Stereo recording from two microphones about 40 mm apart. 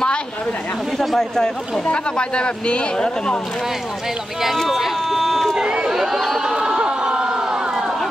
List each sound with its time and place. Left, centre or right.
0.9 s speech: centre
1.9 s speech: left
4.6 s a sound: centre
5.6 s run: right
5.9 s chatter: centre
6.4 s run: right